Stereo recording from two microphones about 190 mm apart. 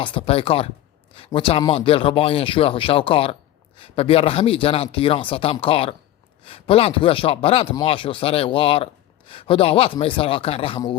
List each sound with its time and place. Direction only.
0.0 s a man's voice: 30° left (ahead or behind)